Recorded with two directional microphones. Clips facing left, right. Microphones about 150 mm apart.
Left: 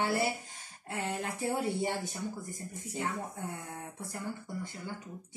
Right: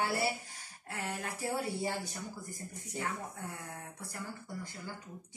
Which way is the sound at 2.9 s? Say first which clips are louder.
Left 3 dB; 20° left (ahead or behind).